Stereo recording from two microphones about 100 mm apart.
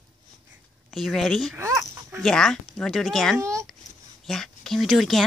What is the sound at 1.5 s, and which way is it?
Dog, 25° right (ahead or behind).